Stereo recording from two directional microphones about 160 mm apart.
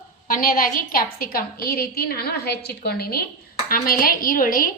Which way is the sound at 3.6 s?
65° left (ahead or behind).